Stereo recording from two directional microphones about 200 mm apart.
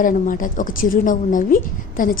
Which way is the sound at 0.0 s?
40° left (ahead or behind).